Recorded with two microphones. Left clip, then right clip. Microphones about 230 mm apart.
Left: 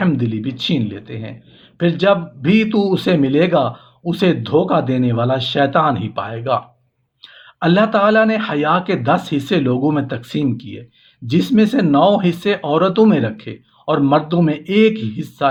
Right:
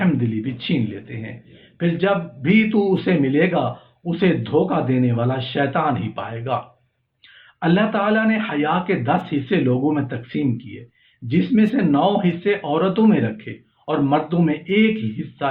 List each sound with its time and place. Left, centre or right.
0.0 s speech: left